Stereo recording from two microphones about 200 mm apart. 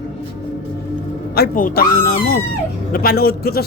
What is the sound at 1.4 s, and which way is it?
Speech, 45° left (ahead or behind).